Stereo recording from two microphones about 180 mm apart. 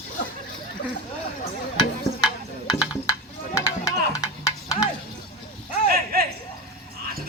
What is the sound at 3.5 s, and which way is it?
Music, 15° left (ahead or behind).